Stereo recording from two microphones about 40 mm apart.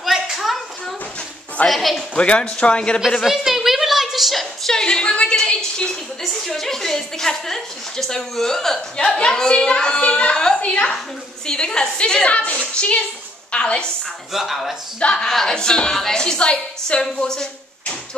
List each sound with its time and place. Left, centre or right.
0.0 s hands: centre
1.7 s a woman's voice: centre
2.1 s a woman's voice: left
3.2 s a sound: centre
4.7 s a woman's voice: centre
6.4 s a woman's voice: centre
10.6 s a woman's voice: left
11.4 s a woman's voice: centre
14.3 s speech: centre
15.1 s a woman's voice: centre
17.0 s a woman's voice: centre